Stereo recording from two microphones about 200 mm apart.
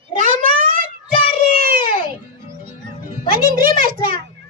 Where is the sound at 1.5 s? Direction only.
45° right (ahead or behind).